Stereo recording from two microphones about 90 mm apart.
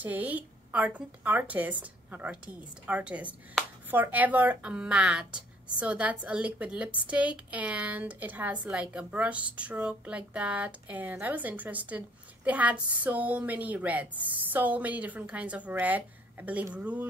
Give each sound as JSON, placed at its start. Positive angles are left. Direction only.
{"t": 0.0, "sound": "speech", "side_deg": -20}